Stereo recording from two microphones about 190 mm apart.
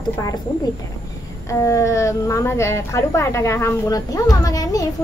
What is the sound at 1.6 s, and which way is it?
Speech, 15° left (ahead or behind).